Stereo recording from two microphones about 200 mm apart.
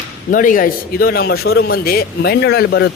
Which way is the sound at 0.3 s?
40° left (ahead or behind).